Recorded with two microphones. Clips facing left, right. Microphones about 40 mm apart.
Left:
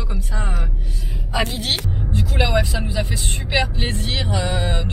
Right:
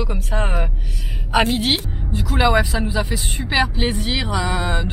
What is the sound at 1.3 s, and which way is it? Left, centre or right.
Speech, right.